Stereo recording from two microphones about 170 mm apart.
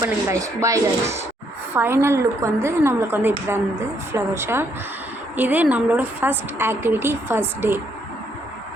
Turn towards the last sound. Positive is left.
turn(degrees=-15)  # may be behind; listen again after turning